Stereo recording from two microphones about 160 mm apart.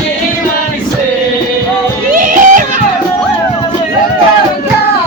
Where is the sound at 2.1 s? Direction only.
60° right (ahead or behind).